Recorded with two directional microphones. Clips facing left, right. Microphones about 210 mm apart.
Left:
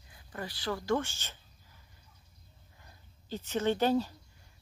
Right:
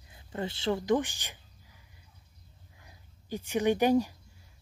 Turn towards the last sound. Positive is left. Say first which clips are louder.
# right 3 dB
turn(degrees=-15)  # may be behind; listen again after turning